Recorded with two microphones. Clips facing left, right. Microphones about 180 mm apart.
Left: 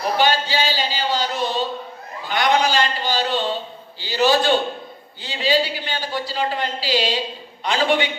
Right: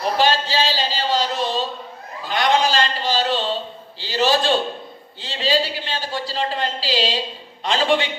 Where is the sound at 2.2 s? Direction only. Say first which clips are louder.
Even; 30° right (ahead or behind).